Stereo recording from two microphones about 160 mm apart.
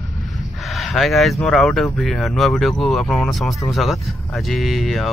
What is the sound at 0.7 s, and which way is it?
Speech, centre (ahead or behind).